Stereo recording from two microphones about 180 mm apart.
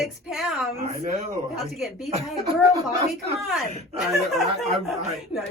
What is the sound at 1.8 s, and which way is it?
Speech, centre (ahead or behind).